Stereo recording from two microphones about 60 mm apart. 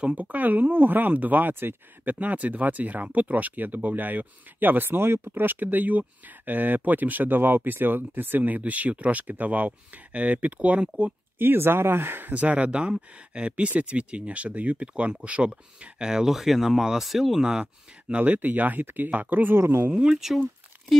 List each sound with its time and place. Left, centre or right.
0.0 s speech: right
2.1 s speech: right
11.3 s speech: right; by 16.1 s centre
16.1 s speech: centre; by 19.6 s right
19.6 s speech: right
19.9 s speech: centre
20.2 s speech: centre